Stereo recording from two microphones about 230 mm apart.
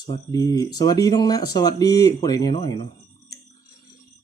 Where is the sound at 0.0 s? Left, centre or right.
Centre.